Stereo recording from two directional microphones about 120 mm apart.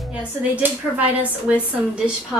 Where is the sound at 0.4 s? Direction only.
15° right (ahead or behind).